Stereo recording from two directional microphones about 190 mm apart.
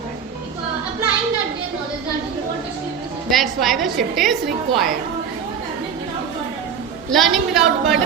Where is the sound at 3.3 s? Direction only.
Centre (ahead or behind).